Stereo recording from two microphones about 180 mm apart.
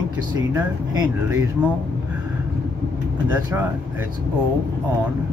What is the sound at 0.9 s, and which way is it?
Speech, 20° right (ahead or behind).